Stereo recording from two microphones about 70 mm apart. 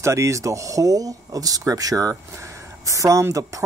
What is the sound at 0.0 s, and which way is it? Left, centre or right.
Speech, right.